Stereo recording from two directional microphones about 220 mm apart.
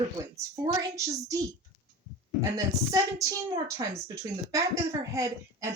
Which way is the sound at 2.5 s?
15° right (ahead or behind).